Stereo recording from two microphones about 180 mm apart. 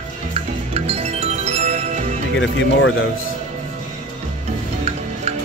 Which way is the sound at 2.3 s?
90° left.